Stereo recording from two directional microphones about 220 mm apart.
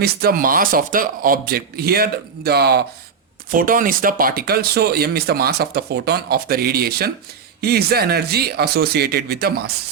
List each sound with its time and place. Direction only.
0.0 s speech: 45° right (ahead or behind)